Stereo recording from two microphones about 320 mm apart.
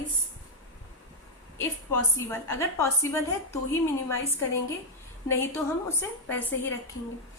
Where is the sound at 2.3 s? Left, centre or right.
Centre.